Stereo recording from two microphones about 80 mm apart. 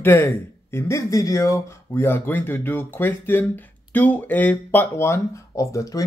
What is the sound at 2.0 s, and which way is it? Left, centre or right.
Speech, left.